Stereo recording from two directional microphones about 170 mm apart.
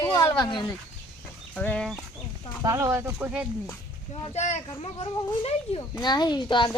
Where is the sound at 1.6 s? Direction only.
5° left (ahead or behind).